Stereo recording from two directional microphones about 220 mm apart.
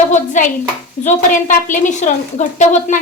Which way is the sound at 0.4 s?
35° left (ahead or behind).